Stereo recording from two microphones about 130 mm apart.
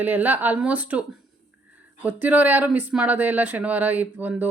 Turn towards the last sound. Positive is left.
turn(degrees=-15)  # may be behind; listen again after turning